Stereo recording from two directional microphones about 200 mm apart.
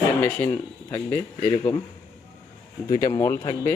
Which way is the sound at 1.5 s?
20° left (ahead or behind).